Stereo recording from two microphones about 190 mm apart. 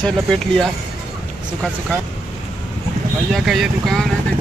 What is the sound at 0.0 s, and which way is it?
Speech, 5° left (ahead or behind).